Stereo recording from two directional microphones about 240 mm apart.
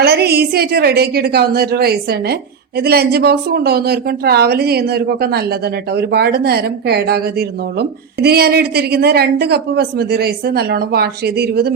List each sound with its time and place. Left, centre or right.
0.0 s a woman's voice: right